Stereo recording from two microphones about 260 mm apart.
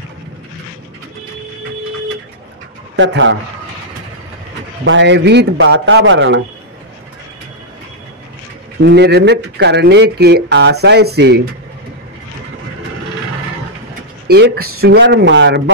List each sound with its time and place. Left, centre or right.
3.0 s a man's voice: right
4.8 s a man's voice: right
8.8 s speech: right
14.2 s a man's voice: right